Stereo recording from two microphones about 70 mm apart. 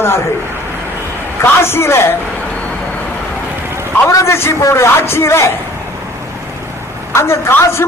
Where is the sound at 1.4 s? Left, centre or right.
Left.